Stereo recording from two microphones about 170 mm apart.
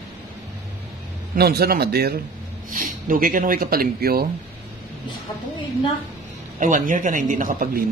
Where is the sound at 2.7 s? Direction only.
50° right (ahead or behind).